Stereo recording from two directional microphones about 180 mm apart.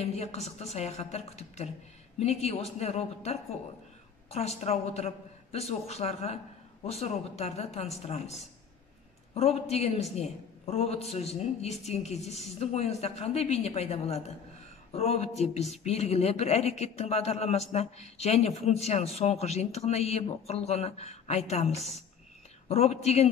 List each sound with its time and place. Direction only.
0.0 s speech: 35° left (ahead or behind)